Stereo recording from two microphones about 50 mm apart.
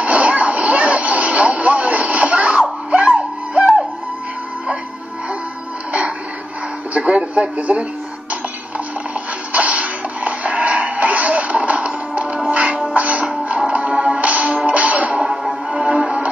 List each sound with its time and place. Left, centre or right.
0.0 s vehicle: right
3.1 s music: centre
6.9 s a sound: right
9.5 s music: right